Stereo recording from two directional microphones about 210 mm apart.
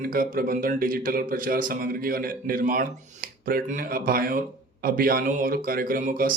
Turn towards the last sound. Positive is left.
turn(degrees=-40)  # may be behind; listen again after turning